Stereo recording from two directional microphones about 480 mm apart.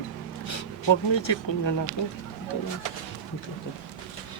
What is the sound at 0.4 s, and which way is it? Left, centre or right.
Speech, left.